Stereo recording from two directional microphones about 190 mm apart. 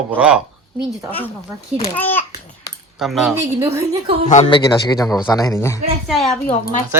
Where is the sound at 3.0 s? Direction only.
Centre (ahead or behind).